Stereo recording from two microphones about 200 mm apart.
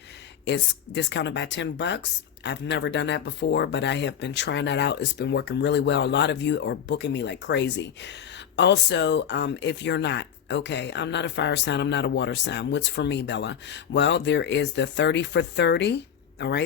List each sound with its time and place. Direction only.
0.4 s speech: 60° left (ahead or behind)